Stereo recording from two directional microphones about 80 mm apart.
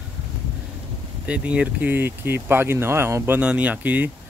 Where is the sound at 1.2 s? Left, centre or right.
Centre.